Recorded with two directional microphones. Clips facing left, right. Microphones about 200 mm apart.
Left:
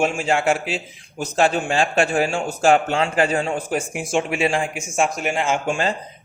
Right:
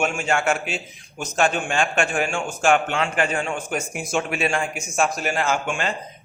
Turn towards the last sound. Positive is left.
turn(degrees=35)  # may be behind; listen again after turning